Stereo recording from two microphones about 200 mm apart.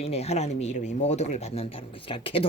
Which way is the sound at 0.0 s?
30° left (ahead or behind).